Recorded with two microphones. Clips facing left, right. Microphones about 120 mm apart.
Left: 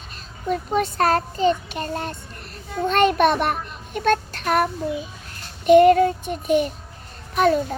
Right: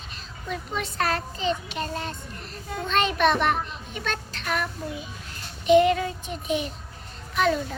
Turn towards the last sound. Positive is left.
turn(degrees=45)  # may be behind; listen again after turning